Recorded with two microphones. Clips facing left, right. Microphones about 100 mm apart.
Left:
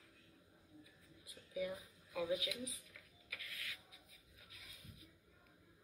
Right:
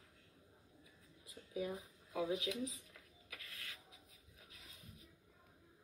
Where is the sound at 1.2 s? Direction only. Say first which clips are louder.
Even; 30° right (ahead or behind).